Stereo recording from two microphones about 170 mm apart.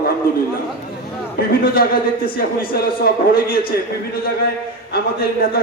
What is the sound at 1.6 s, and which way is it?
Speech, 60° left (ahead or behind).